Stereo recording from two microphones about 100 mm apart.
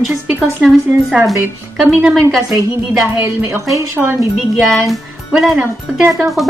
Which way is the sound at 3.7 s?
30° right (ahead or behind).